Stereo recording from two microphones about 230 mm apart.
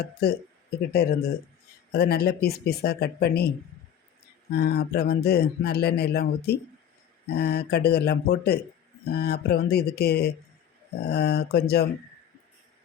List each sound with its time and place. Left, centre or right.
0.0 s speech: left
4.5 s speech: left